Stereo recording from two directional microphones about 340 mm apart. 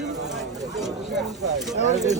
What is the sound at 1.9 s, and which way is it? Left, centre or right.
Speech, centre.